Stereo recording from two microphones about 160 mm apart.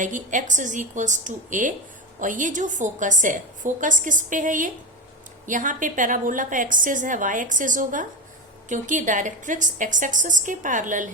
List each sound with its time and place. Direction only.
0.0 s a woman's voice: 55° right (ahead or behind)